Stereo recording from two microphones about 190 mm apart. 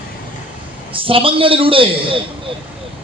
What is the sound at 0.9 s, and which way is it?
A man's voice, 30° right (ahead or behind).